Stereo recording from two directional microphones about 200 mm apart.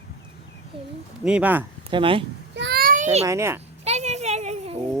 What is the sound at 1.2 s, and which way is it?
Speech, 5° right (ahead or behind).